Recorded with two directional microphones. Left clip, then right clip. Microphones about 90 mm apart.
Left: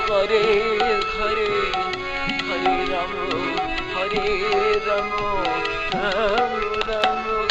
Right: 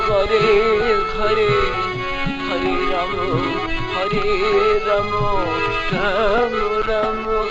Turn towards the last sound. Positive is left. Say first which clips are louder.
# right 3 dB
turn(degrees=-30)  # may be behind; listen again after turning